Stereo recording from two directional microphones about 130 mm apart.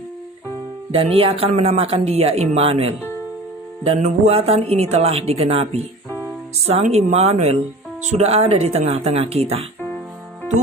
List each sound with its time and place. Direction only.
0.9 s speech: 45° right (ahead or behind)
6.8 s speech: 55° right (ahead or behind)